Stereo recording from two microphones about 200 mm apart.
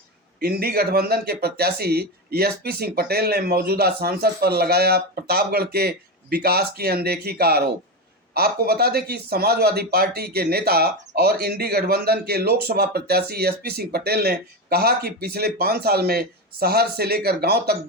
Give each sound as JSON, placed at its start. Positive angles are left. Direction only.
{"t": 0.3, "sound": "speech", "side_deg": -50}